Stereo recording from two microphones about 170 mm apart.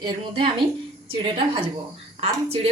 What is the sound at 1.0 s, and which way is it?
Speech, 30° right (ahead or behind).